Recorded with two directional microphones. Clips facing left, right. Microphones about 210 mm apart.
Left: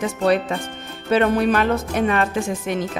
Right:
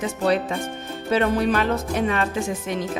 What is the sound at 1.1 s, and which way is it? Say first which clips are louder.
Music: left 3 dB; 60° left (ahead or behind).